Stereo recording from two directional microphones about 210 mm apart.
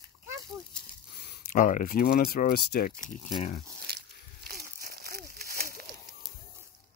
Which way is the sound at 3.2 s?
20° left (ahead or behind).